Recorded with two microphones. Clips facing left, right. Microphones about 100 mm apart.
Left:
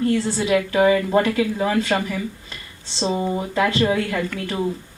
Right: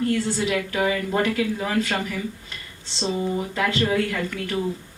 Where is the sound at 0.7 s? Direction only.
35° left (ahead or behind).